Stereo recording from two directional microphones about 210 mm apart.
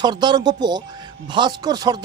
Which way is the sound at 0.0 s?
20° right (ahead or behind).